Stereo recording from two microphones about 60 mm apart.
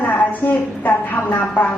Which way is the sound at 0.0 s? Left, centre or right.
Left.